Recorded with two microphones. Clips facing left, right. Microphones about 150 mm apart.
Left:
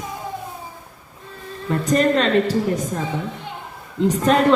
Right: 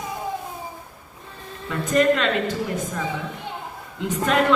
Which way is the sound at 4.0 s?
35° left (ahead or behind).